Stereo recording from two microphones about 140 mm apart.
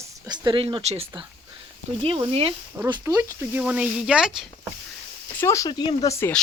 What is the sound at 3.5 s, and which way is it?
Speech, 10° right (ahead or behind).